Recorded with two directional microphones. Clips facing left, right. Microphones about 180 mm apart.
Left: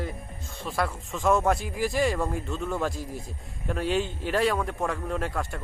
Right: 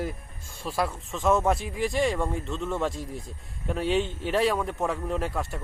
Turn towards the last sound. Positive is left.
turn(degrees=0)  # may be behind; listen again after turning